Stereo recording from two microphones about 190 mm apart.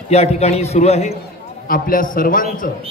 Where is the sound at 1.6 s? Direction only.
50° left (ahead or behind).